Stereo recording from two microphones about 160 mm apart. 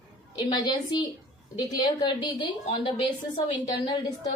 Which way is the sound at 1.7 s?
25° left (ahead or behind).